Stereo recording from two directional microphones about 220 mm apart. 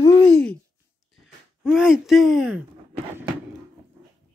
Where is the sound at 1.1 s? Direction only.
5° right (ahead or behind).